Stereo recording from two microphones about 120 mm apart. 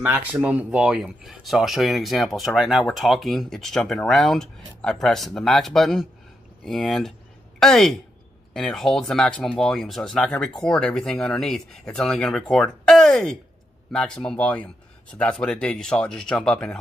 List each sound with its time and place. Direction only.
0.1 s speech: 10° right (ahead or behind); by 16.7 s 5° left (ahead or behind)